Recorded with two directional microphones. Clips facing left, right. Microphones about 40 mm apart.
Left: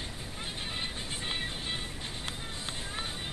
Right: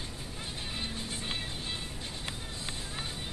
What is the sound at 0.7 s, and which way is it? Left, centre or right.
Music, left.